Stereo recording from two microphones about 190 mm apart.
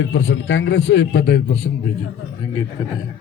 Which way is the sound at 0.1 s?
80° left.